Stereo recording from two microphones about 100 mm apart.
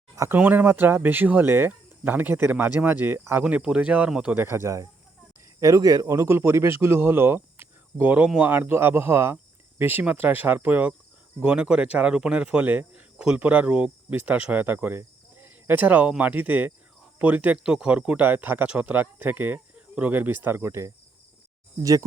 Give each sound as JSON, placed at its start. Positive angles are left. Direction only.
{"t": 0.2, "sound": "speech", "side_deg": -20}
{"t": 3.4, "sound": "speech", "side_deg": -10}
{"t": 4.4, "sound": "speech", "side_deg": -25}